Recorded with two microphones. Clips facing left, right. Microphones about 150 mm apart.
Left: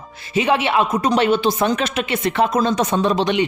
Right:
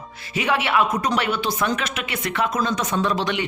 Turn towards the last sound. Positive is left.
turn(degrees=20)  # may be behind; listen again after turning